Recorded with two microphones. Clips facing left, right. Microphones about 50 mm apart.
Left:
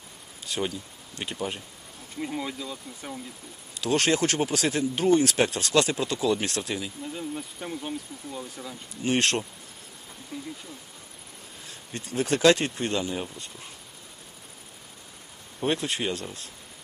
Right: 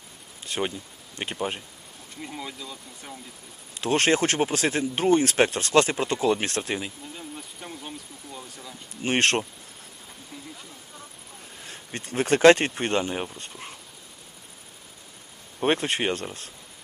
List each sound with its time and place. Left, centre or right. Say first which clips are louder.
0.4 s a sound: right 1 dB; right
1.1 s speech: right 2 dB; right
2.2 s speech: left 4 dB; centre
3.8 s speech: right 2 dB; right
7.0 s speech: left 5 dB; centre
9.0 s speech: right 2 dB; right
11.6 s speech: right 2 dB; right
15.6 s speech: right 3 dB; right